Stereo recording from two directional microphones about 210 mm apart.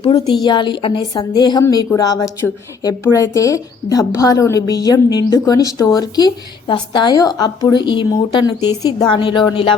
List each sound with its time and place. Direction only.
0.0 s a woman's voice: 25° left (ahead or behind)